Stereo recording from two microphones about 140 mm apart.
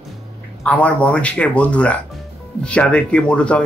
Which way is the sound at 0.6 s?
10° left (ahead or behind).